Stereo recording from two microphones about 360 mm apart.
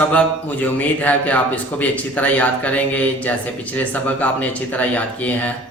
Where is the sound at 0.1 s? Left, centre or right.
Centre.